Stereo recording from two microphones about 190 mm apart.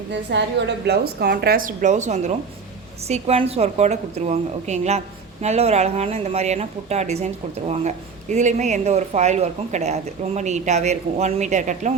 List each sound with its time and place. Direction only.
0.1 s a woman's voice: 65° right (ahead or behind); by 11.9 s 40° right (ahead or behind)